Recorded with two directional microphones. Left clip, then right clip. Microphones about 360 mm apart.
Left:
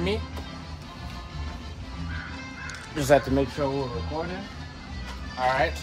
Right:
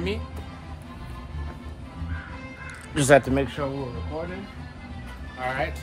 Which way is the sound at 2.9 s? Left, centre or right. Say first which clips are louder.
Right 3 dB; right.